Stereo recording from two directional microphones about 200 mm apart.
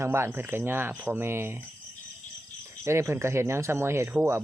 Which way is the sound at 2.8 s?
15° right (ahead or behind).